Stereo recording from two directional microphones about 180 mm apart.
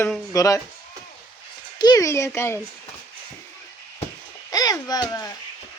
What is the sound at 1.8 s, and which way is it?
Speech, 20° left (ahead or behind).